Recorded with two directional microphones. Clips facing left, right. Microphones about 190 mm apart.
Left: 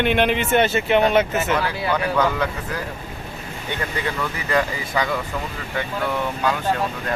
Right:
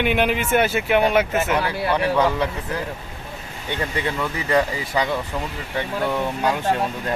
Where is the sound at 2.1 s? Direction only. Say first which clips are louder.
Even; 25° right (ahead or behind).